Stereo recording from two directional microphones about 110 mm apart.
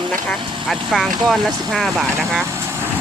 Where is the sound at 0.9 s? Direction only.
Centre (ahead or behind).